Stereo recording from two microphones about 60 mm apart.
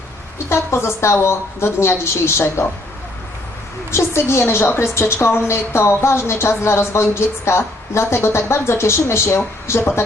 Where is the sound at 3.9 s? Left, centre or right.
Left.